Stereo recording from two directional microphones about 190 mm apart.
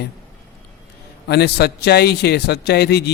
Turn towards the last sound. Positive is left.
turn(degrees=60)  # may be behind; listen again after turning